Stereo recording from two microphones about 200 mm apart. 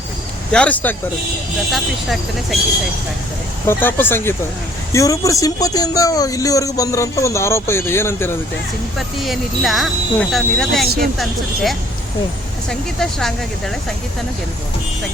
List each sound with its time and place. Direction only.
0.5 s speech: 5° left (ahead or behind)
3.7 s speech: 10° left (ahead or behind)
9.0 s speech: centre (ahead or behind)